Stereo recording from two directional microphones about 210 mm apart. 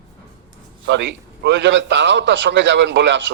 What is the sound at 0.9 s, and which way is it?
A man's voice, 55° right (ahead or behind).